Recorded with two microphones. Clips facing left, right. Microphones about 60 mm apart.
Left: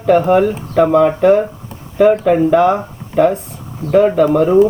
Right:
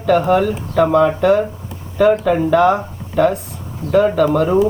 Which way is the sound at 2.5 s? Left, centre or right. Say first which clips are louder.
Left 1 dB; centre.